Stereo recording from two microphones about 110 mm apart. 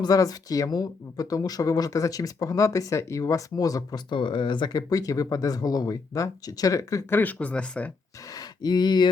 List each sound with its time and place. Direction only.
0.0 s speech: 35° left (ahead or behind)
4.1 s speech: 50° left (ahead or behind); by 7.0 s 30° left (ahead or behind)
7.1 s speech: 15° left (ahead or behind)
8.3 s a sound: 35° left (ahead or behind)